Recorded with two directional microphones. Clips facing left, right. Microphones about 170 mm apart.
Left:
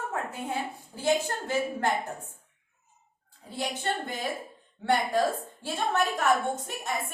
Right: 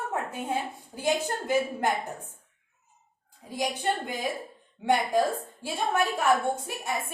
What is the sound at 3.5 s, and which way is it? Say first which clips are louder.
Speech: right 3 dB; 10° right (ahead or behind).